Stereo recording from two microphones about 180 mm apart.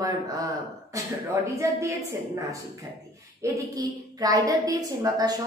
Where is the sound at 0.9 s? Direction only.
15° right (ahead or behind).